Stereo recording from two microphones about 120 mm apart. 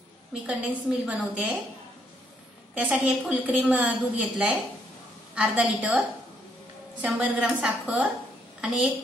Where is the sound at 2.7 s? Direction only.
10° right (ahead or behind).